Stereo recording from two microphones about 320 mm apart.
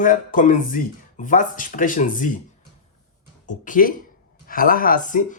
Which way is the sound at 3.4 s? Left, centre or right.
Left.